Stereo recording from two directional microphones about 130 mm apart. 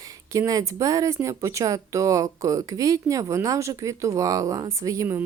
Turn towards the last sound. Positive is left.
turn(degrees=-20)  # may be behind; listen again after turning